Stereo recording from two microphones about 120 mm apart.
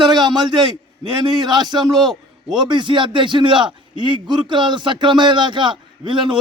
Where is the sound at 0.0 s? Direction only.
40° right (ahead or behind).